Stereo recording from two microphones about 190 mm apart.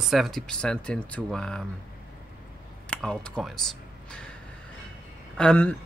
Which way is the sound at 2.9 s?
5° left (ahead or behind).